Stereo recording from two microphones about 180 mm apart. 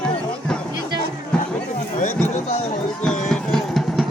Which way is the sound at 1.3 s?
5° left (ahead or behind).